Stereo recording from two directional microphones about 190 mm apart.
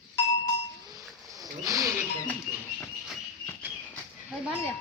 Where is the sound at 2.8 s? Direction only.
5° left (ahead or behind).